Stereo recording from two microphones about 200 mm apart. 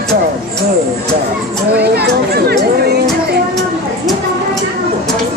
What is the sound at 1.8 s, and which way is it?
Speech, 55° right (ahead or behind).